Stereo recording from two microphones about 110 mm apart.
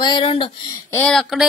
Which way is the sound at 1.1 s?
Centre (ahead or behind).